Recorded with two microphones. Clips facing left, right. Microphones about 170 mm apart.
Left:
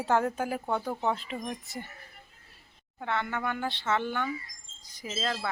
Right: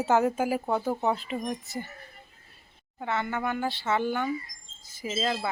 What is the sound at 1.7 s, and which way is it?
Speech, centre (ahead or behind).